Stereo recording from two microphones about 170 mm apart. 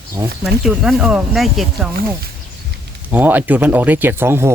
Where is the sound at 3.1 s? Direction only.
10° right (ahead or behind).